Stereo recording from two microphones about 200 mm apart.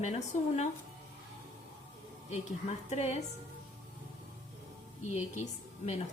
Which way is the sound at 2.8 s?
35° left (ahead or behind).